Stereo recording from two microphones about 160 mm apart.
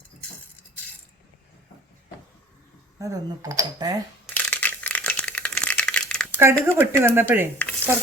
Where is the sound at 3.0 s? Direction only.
20° right (ahead or behind).